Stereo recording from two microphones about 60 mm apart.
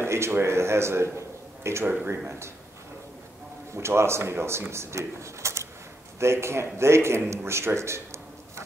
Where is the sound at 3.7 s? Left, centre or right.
Right.